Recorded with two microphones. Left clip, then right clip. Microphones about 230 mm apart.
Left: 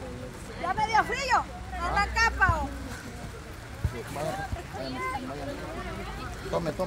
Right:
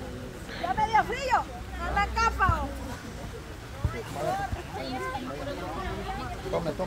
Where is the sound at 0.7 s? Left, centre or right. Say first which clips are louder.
Even; left.